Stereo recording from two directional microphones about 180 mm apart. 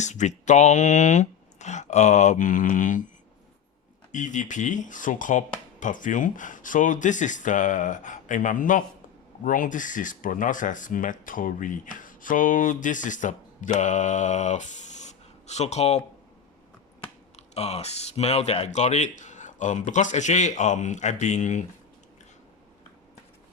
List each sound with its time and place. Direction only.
0.0 s speech: 40° left (ahead or behind)
4.1 s speech: 45° left (ahead or behind)
13.7 s a sound: 40° left (ahead or behind)
17.3 s speech: 35° left (ahead or behind)